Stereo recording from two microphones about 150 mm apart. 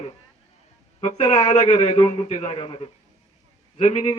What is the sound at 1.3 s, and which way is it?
A man's voice, 35° left (ahead or behind).